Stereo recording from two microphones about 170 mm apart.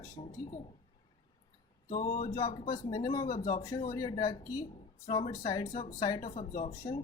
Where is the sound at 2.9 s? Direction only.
20° left (ahead or behind).